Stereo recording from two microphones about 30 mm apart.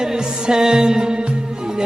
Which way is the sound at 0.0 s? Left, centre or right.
Right.